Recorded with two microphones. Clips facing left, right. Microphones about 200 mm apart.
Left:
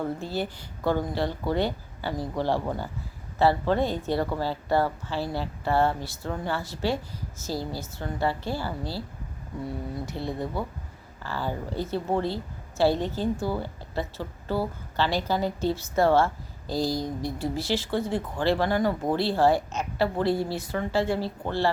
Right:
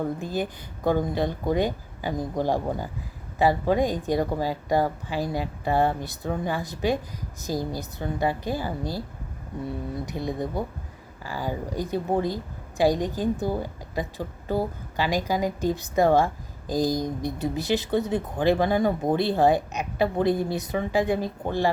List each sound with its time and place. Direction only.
0.2 s speech: 15° right (ahead or behind)
10.1 s speech: 15° right (ahead or behind)